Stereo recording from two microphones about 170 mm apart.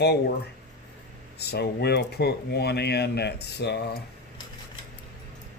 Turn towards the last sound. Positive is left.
turn(degrees=75)  # may be behind; listen again after turning